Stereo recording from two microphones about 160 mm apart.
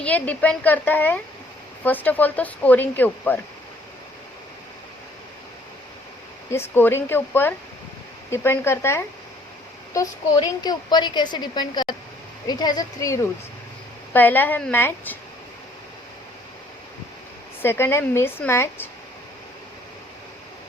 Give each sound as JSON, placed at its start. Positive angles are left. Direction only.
{"t": 0.0, "sound": "speech", "side_deg": 10}
{"t": 6.5, "sound": "a woman's voice", "side_deg": 15}
{"t": 14.1, "sound": "speech", "side_deg": 10}
{"t": 17.6, "sound": "speech", "side_deg": 15}